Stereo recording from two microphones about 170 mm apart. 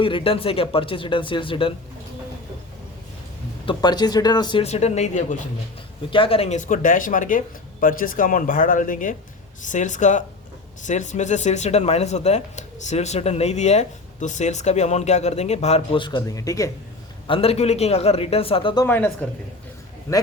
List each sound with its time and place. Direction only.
0.0 s speech: 30° left (ahead or behind)
3.7 s speech: 25° left (ahead or behind)
4.6 s speech: 40° left (ahead or behind)
6.1 s speech: 30° left (ahead or behind)
17.2 s speech: 35° left (ahead or behind)
18.9 s speech: 10° left (ahead or behind)